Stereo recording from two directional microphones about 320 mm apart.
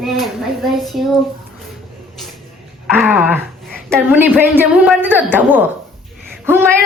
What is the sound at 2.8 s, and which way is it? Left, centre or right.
Speech, centre.